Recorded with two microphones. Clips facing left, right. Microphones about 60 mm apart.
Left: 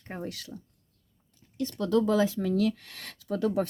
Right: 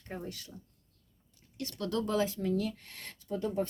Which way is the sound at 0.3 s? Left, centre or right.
Left.